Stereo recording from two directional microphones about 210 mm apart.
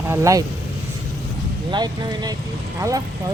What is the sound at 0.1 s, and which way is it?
Speech, 15° right (ahead or behind).